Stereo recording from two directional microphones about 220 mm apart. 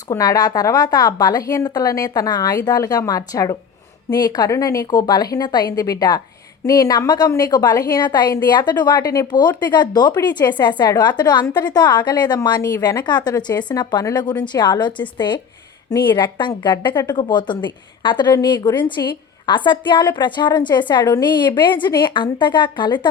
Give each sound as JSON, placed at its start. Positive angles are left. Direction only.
{"t": 0.1, "sound": "a woman's voice", "side_deg": 15}